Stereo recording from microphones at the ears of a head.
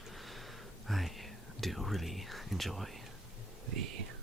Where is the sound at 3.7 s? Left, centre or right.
Right.